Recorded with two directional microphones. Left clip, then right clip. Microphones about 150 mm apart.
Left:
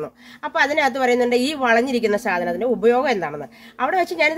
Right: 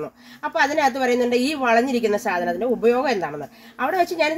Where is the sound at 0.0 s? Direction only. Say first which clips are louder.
Even; 25° left (ahead or behind).